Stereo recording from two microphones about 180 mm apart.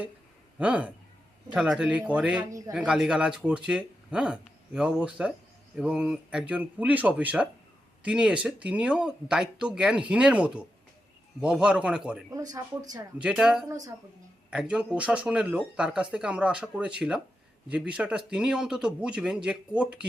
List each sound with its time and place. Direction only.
0.6 s speech: 5° right (ahead or behind)
2.5 s speech: 20° right (ahead or behind)
2.7 s speech: 5° right (ahead or behind)
12.3 s speech: 20° right (ahead or behind)
13.2 s speech: 5° right (ahead or behind)
13.7 s speech: 20° right (ahead or behind)
14.5 s speech: 5° right (ahead or behind)